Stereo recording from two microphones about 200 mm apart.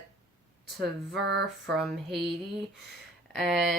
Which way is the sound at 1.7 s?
Centre (ahead or behind).